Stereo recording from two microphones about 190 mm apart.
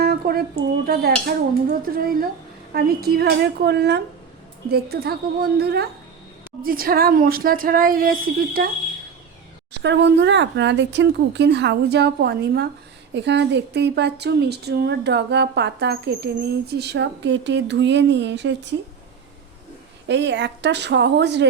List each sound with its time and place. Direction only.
0.0 s a woman's voice: 55° right (ahead or behind)
9.7 s speech: 65° right (ahead or behind)
20.1 s speech: 65° right (ahead or behind)